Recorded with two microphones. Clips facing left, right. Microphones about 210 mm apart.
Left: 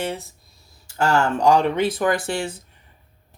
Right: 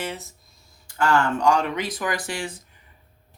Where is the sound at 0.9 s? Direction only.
40° left (ahead or behind).